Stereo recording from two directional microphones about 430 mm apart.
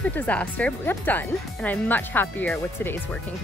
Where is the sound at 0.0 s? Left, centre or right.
Centre.